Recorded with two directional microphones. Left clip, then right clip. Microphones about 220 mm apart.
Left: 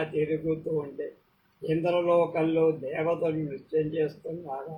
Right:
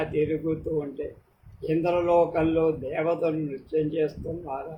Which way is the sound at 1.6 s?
15° right (ahead or behind).